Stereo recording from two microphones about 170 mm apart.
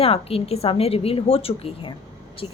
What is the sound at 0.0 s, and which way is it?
A woman's voice, 35° left (ahead or behind).